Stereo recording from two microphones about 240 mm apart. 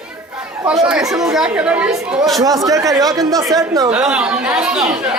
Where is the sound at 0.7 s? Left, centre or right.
Centre.